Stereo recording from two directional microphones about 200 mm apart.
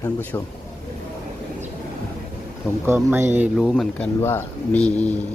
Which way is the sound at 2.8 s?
10° right (ahead or behind).